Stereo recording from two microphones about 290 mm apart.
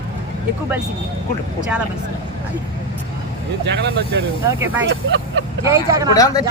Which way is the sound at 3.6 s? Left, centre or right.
Right.